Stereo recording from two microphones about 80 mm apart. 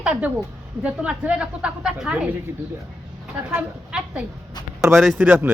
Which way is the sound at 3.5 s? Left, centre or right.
Centre.